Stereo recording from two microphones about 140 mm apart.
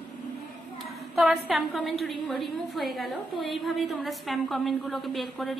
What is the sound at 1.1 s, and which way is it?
A woman's voice, centre (ahead or behind).